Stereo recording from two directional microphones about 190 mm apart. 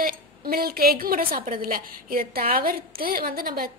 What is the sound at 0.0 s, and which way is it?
A woman's voice, 50° right (ahead or behind).